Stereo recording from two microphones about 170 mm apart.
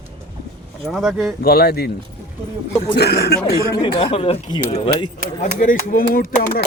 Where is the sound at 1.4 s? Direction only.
65° left (ahead or behind).